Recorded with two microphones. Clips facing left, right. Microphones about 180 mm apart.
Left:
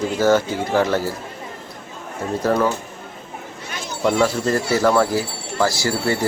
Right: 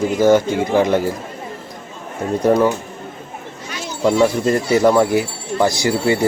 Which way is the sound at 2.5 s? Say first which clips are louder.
Right 5 dB; 15° right (ahead or behind).